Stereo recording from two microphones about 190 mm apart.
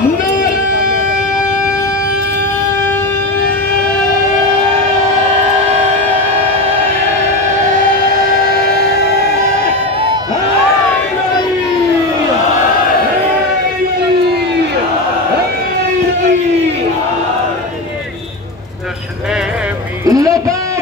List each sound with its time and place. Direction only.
7.7 s music: 45° right (ahead or behind)
20.1 s music: 20° right (ahead or behind)